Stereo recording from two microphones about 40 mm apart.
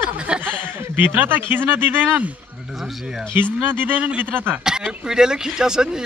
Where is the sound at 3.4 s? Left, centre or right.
Right.